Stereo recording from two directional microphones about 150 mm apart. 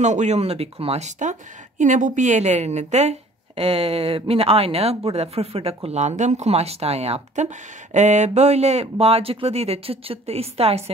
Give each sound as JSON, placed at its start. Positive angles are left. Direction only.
{"t": 0.0, "sound": "speech", "side_deg": -50}